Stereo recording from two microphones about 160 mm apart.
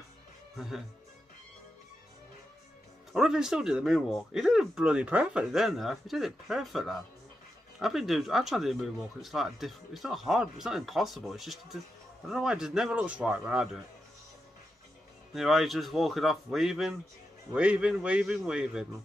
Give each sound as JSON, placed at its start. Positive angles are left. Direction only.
{"t": 0.6, "sound": "speech", "side_deg": 0}
{"t": 3.1, "sound": "speech", "side_deg": -5}
{"t": 15.3, "sound": "a man's voice", "side_deg": 0}